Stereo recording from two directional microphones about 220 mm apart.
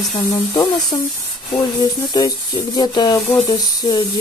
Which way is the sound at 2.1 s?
15° left (ahead or behind).